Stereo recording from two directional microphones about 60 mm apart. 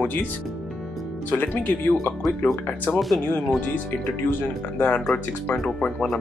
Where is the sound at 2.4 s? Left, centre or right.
Left.